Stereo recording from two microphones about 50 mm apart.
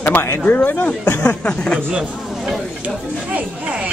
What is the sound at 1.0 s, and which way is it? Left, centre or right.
Speech, left.